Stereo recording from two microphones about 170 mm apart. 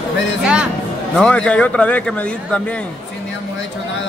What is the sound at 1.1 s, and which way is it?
A man's voice, 5° left (ahead or behind).